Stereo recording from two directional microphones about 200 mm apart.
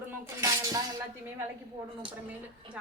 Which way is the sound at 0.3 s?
15° right (ahead or behind).